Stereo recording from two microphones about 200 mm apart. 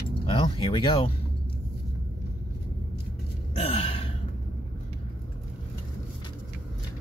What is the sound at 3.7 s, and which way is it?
Gasp, 30° left (ahead or behind).